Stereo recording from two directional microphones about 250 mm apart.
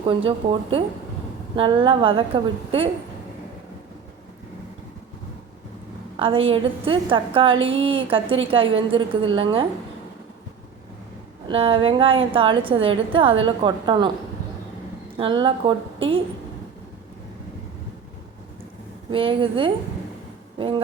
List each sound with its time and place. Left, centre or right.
1.5 s a woman's voice: right
6.1 s a woman's voice: right
11.4 s a woman's voice: right
15.2 s a woman's voice: centre
19.1 s a woman's voice: right